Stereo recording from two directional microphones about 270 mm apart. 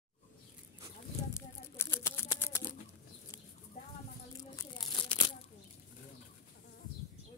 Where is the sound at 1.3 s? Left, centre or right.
Centre.